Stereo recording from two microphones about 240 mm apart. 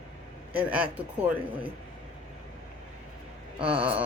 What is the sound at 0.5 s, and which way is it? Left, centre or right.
Speech, centre.